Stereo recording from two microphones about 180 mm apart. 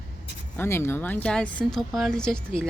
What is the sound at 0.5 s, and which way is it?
Speech, 15° left (ahead or behind).